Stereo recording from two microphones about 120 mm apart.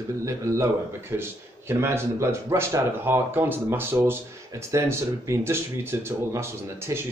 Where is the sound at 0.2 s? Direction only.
25° right (ahead or behind).